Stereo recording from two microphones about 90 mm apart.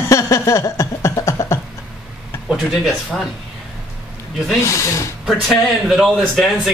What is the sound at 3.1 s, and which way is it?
Speech, centre (ahead or behind).